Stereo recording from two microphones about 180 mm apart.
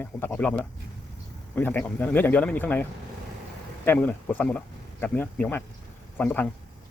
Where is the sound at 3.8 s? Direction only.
10° left (ahead or behind).